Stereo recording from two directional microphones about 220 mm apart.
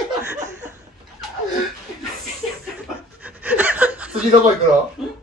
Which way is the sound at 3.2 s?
5° right (ahead or behind).